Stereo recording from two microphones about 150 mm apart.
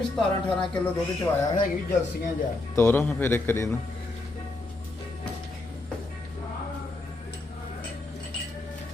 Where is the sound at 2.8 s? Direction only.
15° left (ahead or behind).